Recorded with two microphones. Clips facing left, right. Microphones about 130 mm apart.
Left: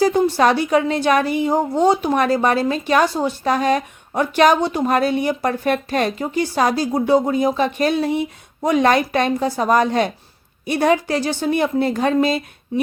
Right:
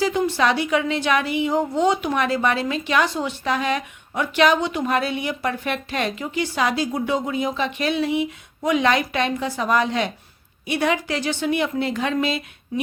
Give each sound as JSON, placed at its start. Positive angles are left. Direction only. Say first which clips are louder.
{"t": 0.0, "sound": "a woman's voice", "louder": "left 5 dB", "side_deg": 40}